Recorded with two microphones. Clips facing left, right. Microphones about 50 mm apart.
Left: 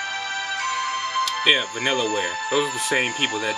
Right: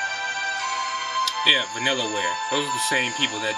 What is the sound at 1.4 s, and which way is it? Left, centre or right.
Speech, centre.